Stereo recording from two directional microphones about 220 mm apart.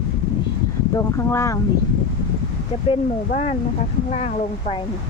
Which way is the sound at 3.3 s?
30° left (ahead or behind).